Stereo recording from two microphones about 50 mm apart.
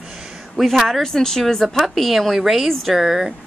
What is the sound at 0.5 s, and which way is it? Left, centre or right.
Speech, centre.